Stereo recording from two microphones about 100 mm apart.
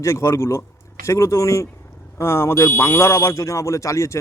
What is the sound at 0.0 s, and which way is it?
Speech, 30° left (ahead or behind).